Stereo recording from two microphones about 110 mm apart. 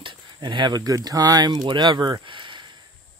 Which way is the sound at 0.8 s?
35° right (ahead or behind).